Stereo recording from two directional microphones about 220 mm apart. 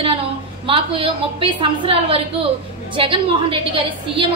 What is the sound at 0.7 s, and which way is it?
A woman's voice, 25° right (ahead or behind).